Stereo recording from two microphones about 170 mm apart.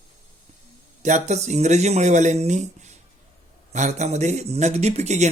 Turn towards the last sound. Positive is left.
turn(degrees=-40)  # may be behind; listen again after turning